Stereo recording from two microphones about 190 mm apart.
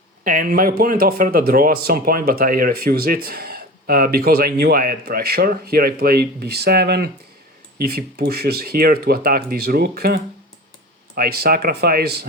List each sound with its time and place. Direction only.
0.3 s speech: 45° right (ahead or behind)